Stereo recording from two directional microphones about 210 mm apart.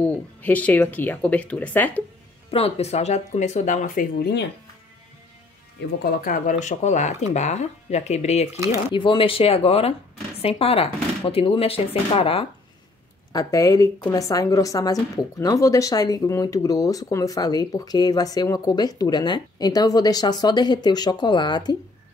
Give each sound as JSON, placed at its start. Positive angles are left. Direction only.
{"t": 0.0, "sound": "speech", "side_deg": 5}
{"t": 2.5, "sound": "speech", "side_deg": 30}
{"t": 6.0, "sound": "speech", "side_deg": 45}